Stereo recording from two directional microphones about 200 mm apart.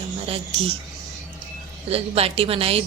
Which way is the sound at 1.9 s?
30° right (ahead or behind).